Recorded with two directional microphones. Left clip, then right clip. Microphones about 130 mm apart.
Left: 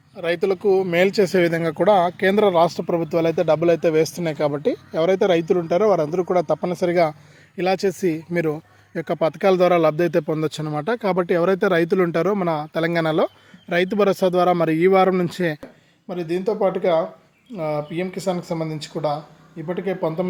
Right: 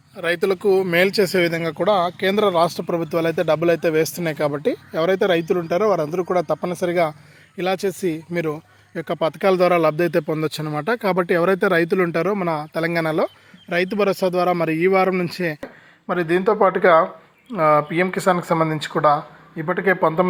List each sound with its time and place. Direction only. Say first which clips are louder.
0.2 s speech: right 1 dB; centre (ahead or behind)
1.0 s a man's voice: even; 15° left (ahead or behind)
1.5 s a man's voice: left 2 dB; 35° left (ahead or behind)
15.6 s speech: right 8 dB; 5° left (ahead or behind)
17.8 s speech: right 6 dB; centre (ahead or behind)
19.8 s speech: right 7 dB; 75° right (ahead or behind)